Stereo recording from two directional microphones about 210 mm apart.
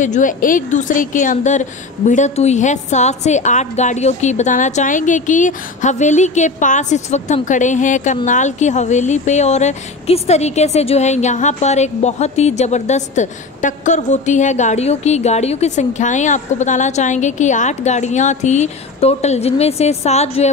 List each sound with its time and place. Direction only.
0.0 s a woman's voice: 35° left (ahead or behind)